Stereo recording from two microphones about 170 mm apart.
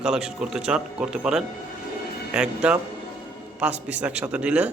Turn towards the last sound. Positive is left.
turn(degrees=-5)  # may be behind; listen again after turning